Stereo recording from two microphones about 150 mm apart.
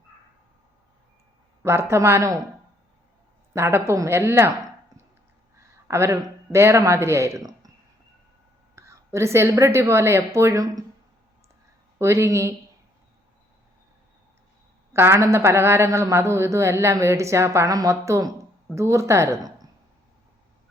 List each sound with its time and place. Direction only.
1.6 s a woman's voice: 15° right (ahead or behind)
3.5 s a woman's voice: 15° right (ahead or behind)
5.9 s a woman's voice: 20° right (ahead or behind)
8.7 s a woman's voice: 20° right (ahead or behind)
11.9 s a woman's voice: 20° right (ahead or behind)
14.9 s a woman's voice: 15° right (ahead or behind)